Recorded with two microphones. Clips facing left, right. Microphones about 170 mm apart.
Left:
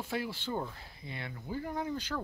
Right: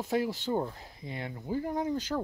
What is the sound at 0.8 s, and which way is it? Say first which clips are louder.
Speech: right 4 dB; 40° right (ahead or behind).